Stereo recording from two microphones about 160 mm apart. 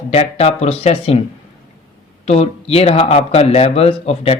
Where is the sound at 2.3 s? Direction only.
40° left (ahead or behind).